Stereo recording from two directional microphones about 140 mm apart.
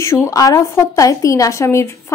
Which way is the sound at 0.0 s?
20° left (ahead or behind).